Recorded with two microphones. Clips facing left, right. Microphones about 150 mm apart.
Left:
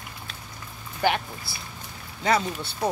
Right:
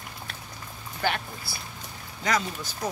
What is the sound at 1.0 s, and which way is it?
Speech, 20° left (ahead or behind).